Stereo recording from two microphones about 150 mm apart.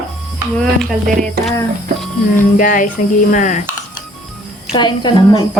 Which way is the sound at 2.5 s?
65° left (ahead or behind).